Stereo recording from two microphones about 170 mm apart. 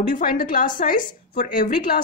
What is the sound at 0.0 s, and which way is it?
A woman's voice, 55° left (ahead or behind).